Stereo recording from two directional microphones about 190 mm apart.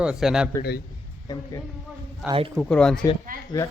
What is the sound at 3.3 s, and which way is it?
Speech, 45° right (ahead or behind).